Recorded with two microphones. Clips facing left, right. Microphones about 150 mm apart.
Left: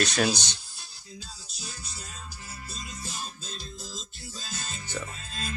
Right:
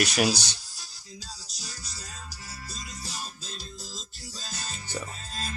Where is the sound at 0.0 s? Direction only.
10° right (ahead or behind).